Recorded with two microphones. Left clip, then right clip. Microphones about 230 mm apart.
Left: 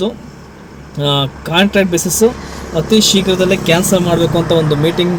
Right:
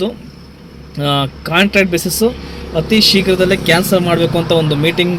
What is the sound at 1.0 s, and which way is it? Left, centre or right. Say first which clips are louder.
Speech: left 1 dB; centre.